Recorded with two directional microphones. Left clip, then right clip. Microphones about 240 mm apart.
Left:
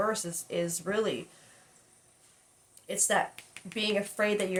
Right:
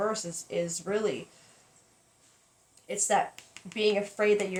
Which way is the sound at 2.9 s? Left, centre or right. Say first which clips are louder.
Right 1 dB; centre.